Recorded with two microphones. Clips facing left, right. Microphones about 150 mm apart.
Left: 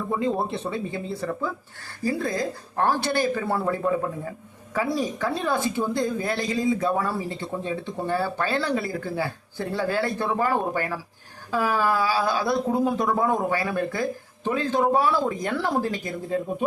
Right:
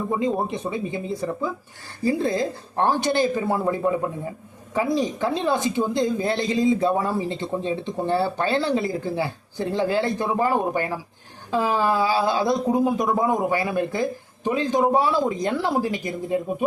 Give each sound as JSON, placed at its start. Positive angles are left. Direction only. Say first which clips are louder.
{"t": 0.1, "sound": "a woman's voice", "louder": "even", "side_deg": -15}